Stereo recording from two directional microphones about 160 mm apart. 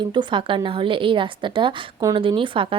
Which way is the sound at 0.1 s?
30° right (ahead or behind).